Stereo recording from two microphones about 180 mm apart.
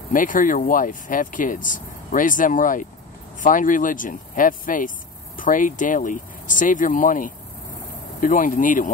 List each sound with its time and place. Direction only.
0.1 s speech: 50° left (ahead or behind)